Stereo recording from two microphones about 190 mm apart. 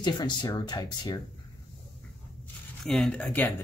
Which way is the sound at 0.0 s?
25° left (ahead or behind).